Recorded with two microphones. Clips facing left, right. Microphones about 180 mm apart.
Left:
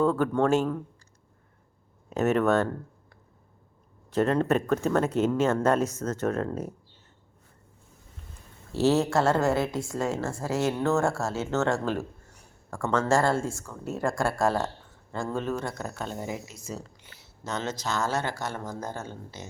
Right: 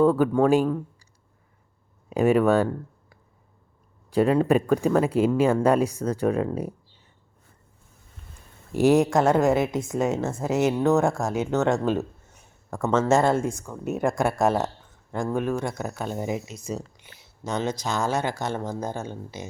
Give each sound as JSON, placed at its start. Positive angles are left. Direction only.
{"t": 0.0, "sound": "speech", "side_deg": -15}
{"t": 2.0, "sound": "speech", "side_deg": -10}
{"t": 4.1, "sound": "speech", "side_deg": -10}
{"t": 8.7, "sound": "a woman's voice", "side_deg": -15}